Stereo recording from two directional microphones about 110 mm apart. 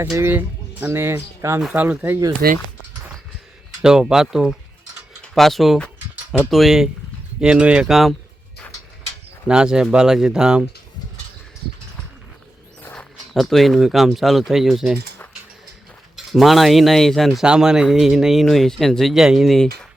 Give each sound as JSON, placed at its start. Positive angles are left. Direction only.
{"t": 0.0, "sound": "speech", "side_deg": -20}
{"t": 3.8, "sound": "speech", "side_deg": -5}
{"t": 9.5, "sound": "speech", "side_deg": -5}
{"t": 12.8, "sound": "a sound", "side_deg": 10}
{"t": 13.3, "sound": "speech", "side_deg": 0}
{"t": 16.1, "sound": "speech", "side_deg": 0}